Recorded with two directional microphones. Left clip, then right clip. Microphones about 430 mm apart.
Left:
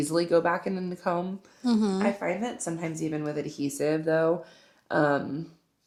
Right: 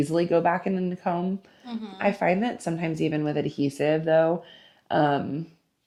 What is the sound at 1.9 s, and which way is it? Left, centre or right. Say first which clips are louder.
Speech: right 5 dB; right.